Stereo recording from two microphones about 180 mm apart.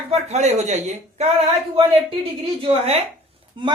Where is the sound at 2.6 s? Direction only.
35° right (ahead or behind).